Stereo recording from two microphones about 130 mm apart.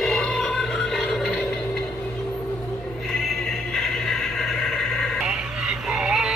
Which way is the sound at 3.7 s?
5° left (ahead or behind).